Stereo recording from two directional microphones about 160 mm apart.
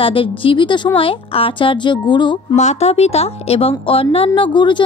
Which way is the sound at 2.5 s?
45° left (ahead or behind).